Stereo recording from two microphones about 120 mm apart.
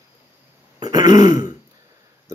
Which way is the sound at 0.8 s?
30° right (ahead or behind).